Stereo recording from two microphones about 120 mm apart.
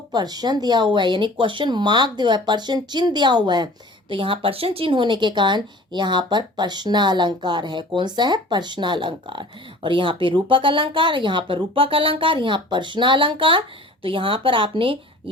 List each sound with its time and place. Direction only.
0.1 s speech: 35° right (ahead or behind)